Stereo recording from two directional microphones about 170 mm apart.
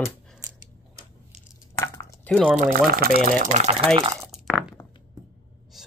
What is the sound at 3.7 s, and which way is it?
Speech, 30° right (ahead or behind).